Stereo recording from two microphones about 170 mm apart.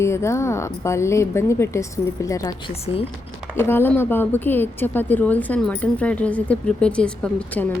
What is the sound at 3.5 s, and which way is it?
A woman's voice, 15° left (ahead or behind).